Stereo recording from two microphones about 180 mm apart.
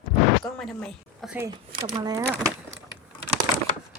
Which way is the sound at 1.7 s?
25° right (ahead or behind).